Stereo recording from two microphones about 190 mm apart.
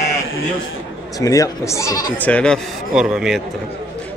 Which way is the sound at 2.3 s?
5° left (ahead or behind).